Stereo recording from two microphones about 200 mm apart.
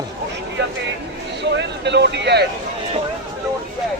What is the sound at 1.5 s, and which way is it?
Speech, 60° right (ahead or behind).